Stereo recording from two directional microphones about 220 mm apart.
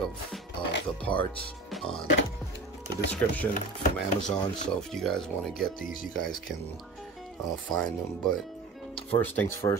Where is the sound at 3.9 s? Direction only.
5° left (ahead or behind).